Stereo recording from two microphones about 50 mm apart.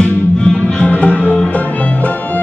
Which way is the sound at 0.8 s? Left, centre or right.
Left.